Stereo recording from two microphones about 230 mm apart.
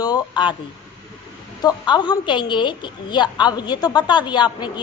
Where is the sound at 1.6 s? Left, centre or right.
Centre.